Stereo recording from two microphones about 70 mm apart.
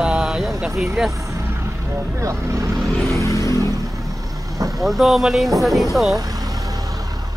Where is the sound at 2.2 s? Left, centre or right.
Right.